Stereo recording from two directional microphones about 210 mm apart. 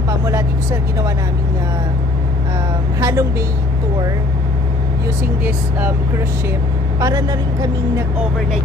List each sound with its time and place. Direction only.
0.3 s a woman's voice: 15° right (ahead or behind)
3.0 s a woman's voice: 15° right (ahead or behind)
5.4 s a woman's voice: 10° right (ahead or behind)
7.0 s a woman's voice: 20° right (ahead or behind)